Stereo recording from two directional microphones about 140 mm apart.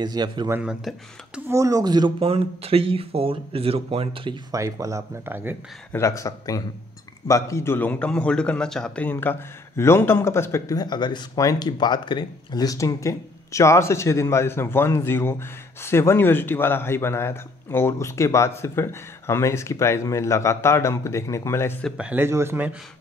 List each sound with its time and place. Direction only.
0.0 s speech: 30° right (ahead or behind)
0.5 s speech: 10° right (ahead or behind)
1.5 s speech: 25° right (ahead or behind)
2.1 s speech: 45° right (ahead or behind)
4.5 s speech: 25° right (ahead or behind)
5.9 s a man's voice: 20° left (ahead or behind)
21.8 s speech: 5° right (ahead or behind)